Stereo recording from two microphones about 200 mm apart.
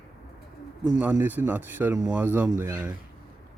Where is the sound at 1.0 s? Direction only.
10° right (ahead or behind).